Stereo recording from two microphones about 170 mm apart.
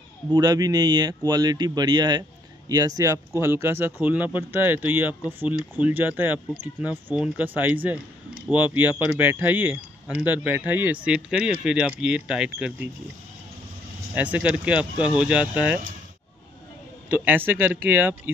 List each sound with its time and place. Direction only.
0.3 s a man's voice: 25° right (ahead or behind)
9.0 s a man's voice: 10° right (ahead or behind)
14.1 s a man's voice: 10° right (ahead or behind)
17.1 s a man's voice: 10° right (ahead or behind)